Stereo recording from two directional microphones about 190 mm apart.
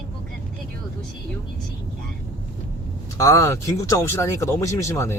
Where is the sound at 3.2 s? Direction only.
15° left (ahead or behind).